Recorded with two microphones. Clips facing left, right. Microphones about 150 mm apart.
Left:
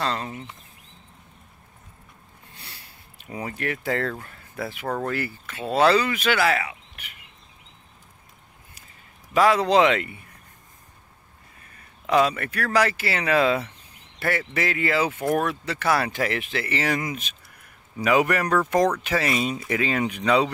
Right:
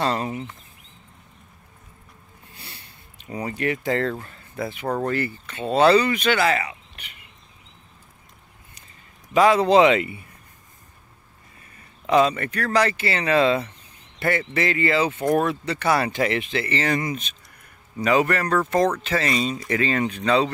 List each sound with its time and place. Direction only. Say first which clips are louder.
0.0 s speech: right 4 dB; 15° right (ahead or behind)
2.5 s a sound: right 2 dB; centre (ahead or behind)
4.1 s speech: right 3 dB; 5° left (ahead or behind)
9.3 s speech: right 3 dB; centre (ahead or behind)
12.1 s speech: right 2 dB; 5° left (ahead or behind)